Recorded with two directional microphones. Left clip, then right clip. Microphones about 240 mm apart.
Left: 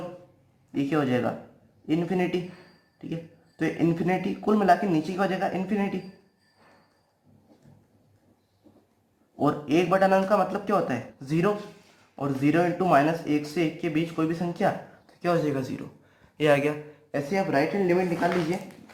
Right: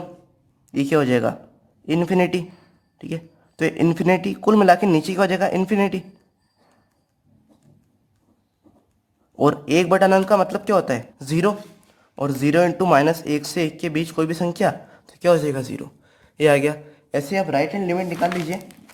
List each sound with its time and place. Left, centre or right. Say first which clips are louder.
0.7 s speech: right 7 dB; right
3.6 s speech: right 6 dB; right
9.4 s speech: right 6 dB; right